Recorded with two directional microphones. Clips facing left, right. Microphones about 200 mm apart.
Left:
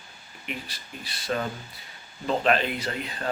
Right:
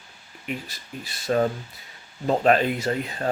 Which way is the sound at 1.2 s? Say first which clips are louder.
Right 7 dB; 40° right (ahead or behind).